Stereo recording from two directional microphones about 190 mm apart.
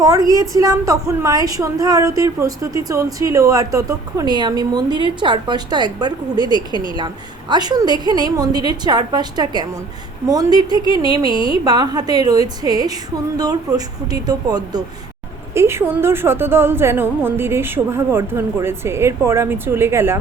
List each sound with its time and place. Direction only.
0.3 s a woman's voice: 20° right (ahead or behind)